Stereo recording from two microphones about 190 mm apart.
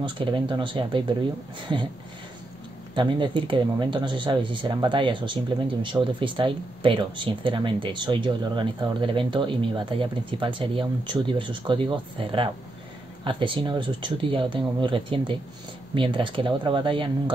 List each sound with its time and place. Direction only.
0.0 s speech: 25° right (ahead or behind)
2.9 s speech: 25° right (ahead or behind)